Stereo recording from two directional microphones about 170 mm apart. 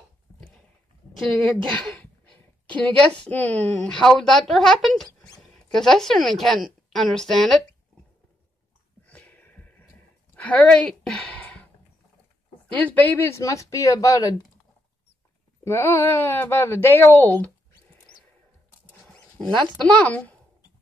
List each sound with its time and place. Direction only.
1.1 s a woman's voice: centre (ahead or behind)
1.7 s a sound: 5° left (ahead or behind)
2.8 s a woman's voice: 5° left (ahead or behind)
9.0 s a sound: 10° left (ahead or behind)
10.3 s speech: 10° left (ahead or behind)
12.6 s speech: 10° left (ahead or behind)
15.6 s speech: 15° left (ahead or behind)
19.8 s speech: 5° left (ahead or behind)